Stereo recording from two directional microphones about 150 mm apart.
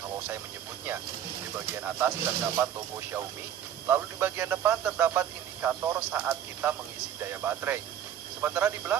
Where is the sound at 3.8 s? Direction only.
15° right (ahead or behind).